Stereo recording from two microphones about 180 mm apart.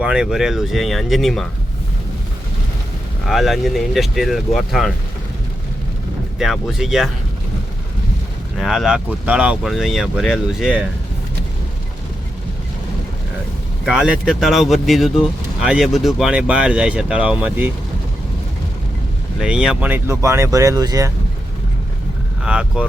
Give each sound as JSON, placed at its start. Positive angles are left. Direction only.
{"t": 0.0, "sound": "speech", "side_deg": -5}
{"t": 3.2, "sound": "speech", "side_deg": 0}
{"t": 6.4, "sound": "speech", "side_deg": 0}
{"t": 8.5, "sound": "speech", "side_deg": 0}
{"t": 13.8, "sound": "speech", "side_deg": -5}
{"t": 19.4, "sound": "speech", "side_deg": -5}
{"t": 22.4, "sound": "speech", "side_deg": -5}